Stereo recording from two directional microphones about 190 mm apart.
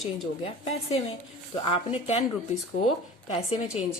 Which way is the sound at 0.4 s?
30° left (ahead or behind).